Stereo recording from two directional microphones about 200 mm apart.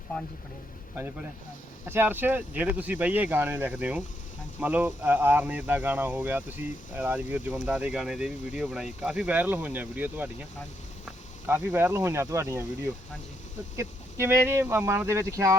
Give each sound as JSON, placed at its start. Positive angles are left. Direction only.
{"t": 1.8, "sound": "speech", "side_deg": -10}
{"t": 11.4, "sound": "speech", "side_deg": -10}
{"t": 13.7, "sound": "speech", "side_deg": -10}